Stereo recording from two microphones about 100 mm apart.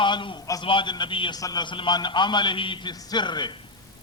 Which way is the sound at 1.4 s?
45° left (ahead or behind).